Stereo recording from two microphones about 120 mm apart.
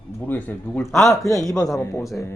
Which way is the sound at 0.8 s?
Centre (ahead or behind).